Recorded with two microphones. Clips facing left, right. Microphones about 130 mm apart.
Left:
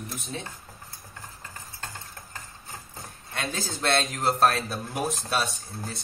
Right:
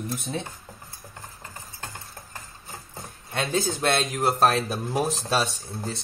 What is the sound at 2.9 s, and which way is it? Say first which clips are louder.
Speech: right 5 dB; 25° right (ahead or behind).